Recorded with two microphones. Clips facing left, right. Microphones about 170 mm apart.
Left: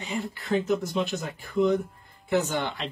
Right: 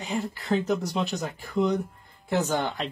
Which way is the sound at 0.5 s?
40° right (ahead or behind).